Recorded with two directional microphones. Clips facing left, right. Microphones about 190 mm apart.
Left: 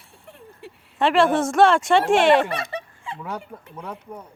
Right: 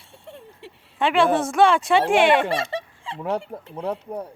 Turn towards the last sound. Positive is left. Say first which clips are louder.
# right 7 dB
turn(degrees=-30)  # may be behind; listen again after turning